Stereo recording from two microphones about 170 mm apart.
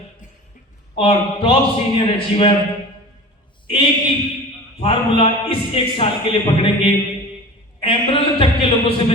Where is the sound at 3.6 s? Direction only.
30° left (ahead or behind).